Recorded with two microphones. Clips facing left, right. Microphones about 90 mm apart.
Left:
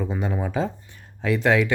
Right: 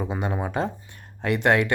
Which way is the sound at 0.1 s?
60° right (ahead or behind).